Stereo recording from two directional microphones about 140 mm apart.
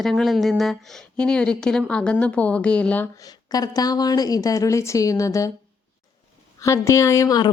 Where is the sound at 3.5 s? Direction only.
25° left (ahead or behind).